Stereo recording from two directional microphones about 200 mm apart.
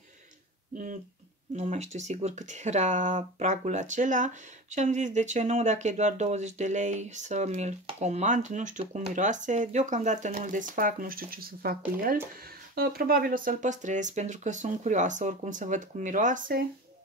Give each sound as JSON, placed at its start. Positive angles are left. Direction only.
{"t": 1.6, "sound": "speech", "side_deg": -35}
{"t": 12.7, "sound": "speech", "side_deg": -50}